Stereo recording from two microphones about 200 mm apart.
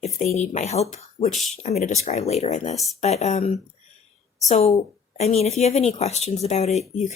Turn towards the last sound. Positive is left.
turn(degrees=35)  # may be behind; listen again after turning